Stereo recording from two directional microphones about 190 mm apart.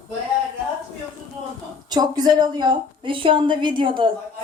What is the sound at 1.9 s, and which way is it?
A woman's voice, 20° right (ahead or behind).